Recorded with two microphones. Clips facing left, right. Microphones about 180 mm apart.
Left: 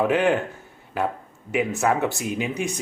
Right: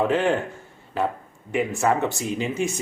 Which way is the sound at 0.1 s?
Centre (ahead or behind).